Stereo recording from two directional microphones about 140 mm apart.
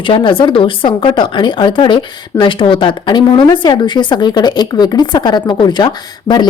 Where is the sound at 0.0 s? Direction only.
35° left (ahead or behind).